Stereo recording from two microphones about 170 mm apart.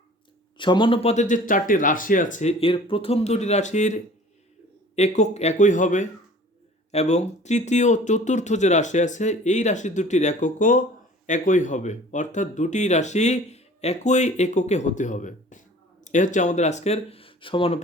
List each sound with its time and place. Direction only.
0.5 s speech: 30° left (ahead or behind)
1.1 s speech: 45° left (ahead or behind)